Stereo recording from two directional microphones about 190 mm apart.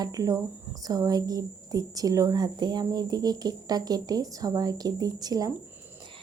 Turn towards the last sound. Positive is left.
turn(degrees=-20)  # may be behind; listen again after turning